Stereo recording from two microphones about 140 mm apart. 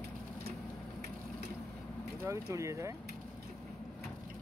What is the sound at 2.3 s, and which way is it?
Speech, 20° right (ahead or behind).